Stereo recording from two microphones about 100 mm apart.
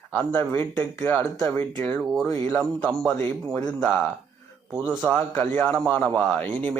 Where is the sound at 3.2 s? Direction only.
25° left (ahead or behind).